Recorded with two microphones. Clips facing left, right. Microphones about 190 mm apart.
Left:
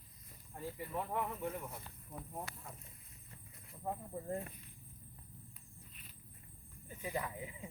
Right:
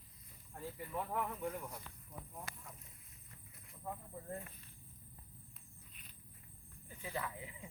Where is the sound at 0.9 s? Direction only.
5° left (ahead or behind).